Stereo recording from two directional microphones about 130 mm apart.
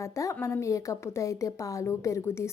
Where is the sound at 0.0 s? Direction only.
25° left (ahead or behind).